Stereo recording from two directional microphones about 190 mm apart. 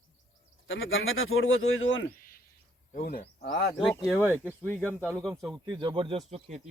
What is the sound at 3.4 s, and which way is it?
Speech, 60° left (ahead or behind).